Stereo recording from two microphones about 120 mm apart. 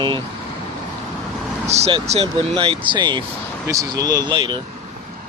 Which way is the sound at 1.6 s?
65° right (ahead or behind).